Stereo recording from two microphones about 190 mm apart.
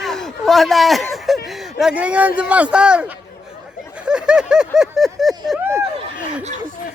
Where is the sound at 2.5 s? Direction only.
5° right (ahead or behind).